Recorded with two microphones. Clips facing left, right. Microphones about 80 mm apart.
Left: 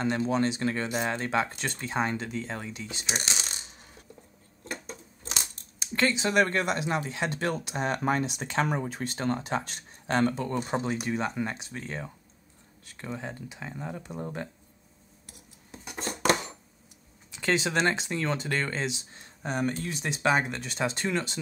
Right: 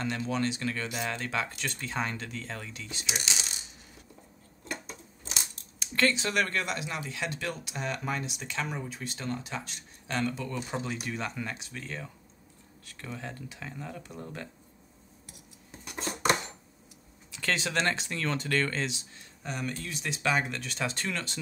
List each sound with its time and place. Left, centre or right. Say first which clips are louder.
0.0 s speech: left 4 dB; left
3.1 s speech: left 2 dB; left
5.8 s speech: left 1 dB; centre; by 10.8 s left
11.1 s speech: left 5 dB; left
17.4 s speech: left 4 dB; centre
18.9 s speech: left 1 dB; left